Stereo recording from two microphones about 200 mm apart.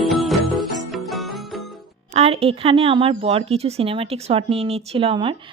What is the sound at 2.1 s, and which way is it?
Speech, 30° right (ahead or behind).